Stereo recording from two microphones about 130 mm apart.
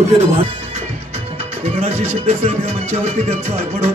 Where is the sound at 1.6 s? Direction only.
55° right (ahead or behind).